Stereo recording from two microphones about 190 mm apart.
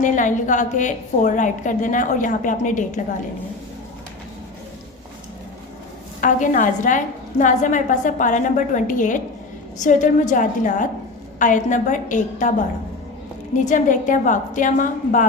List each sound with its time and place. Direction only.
0.0 s a woman's voice: 40° left (ahead or behind)
6.1 s a woman's voice: 40° left (ahead or behind)
13.7 s a woman's voice: 40° left (ahead or behind)